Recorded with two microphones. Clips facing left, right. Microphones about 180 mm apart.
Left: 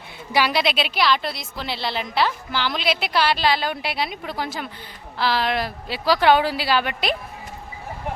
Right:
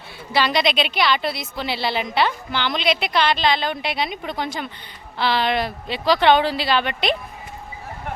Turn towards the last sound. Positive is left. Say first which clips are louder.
# right 1 dB
turn(degrees=5)  # may be behind; listen again after turning